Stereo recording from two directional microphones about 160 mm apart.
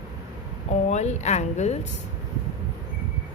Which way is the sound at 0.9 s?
45° left (ahead or behind).